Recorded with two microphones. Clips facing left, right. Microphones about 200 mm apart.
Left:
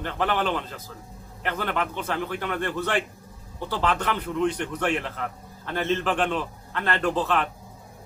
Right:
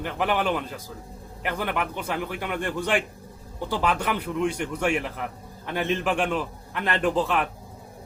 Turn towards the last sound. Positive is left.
turn(degrees=-10)  # may be behind; listen again after turning